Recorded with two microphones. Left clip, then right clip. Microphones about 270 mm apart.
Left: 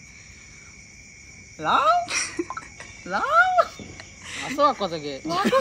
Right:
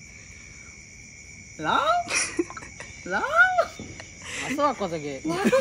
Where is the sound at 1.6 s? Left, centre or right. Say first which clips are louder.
Left 3 dB; centre.